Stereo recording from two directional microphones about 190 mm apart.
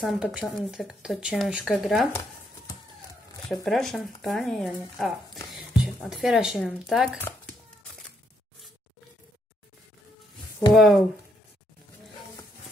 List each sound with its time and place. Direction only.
0.0 s speech: centre (ahead or behind)
3.6 s speech: centre (ahead or behind)
10.7 s speech: centre (ahead or behind)